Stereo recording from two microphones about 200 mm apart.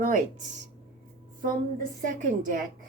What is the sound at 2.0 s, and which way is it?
Speech, 40° right (ahead or behind).